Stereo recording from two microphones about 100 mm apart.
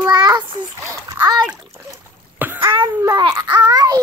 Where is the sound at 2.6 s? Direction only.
55° right (ahead or behind).